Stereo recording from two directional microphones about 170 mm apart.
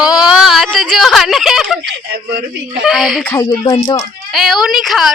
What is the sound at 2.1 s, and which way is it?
Speech, 70° right (ahead or behind).